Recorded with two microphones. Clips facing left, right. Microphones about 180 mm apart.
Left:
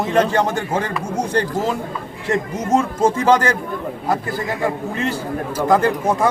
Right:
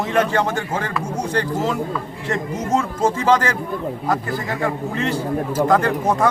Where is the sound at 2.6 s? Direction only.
15° left (ahead or behind).